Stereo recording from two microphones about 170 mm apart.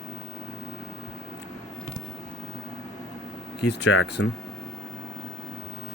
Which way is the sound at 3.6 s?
85° left.